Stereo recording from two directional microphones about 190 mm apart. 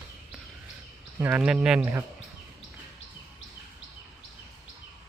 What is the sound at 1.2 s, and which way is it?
Speech, 10° right (ahead or behind).